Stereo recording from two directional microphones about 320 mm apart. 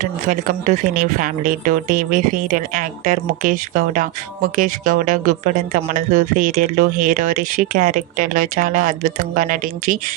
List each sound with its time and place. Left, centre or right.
0.0 s speech: right